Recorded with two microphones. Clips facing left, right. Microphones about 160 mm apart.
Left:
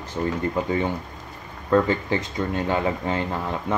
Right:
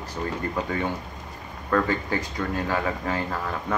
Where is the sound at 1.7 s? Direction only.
20° left (ahead or behind).